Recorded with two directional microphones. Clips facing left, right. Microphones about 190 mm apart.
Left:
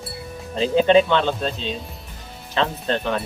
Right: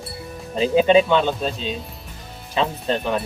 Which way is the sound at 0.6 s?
10° right (ahead or behind).